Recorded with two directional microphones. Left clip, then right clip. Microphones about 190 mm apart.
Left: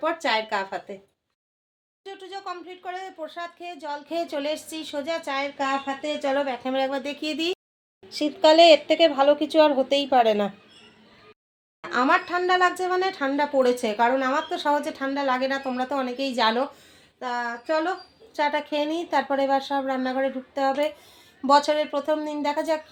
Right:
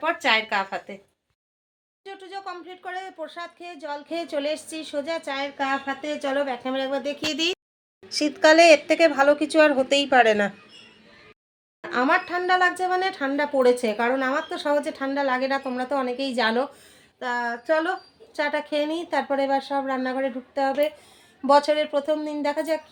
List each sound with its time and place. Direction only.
0.0 s speech: 10° right (ahead or behind)
2.0 s speech: 10° left (ahead or behind)
8.2 s a woman's voice: 30° right (ahead or behind)
8.9 s speech: centre (ahead or behind)
11.8 s speech: 5° left (ahead or behind)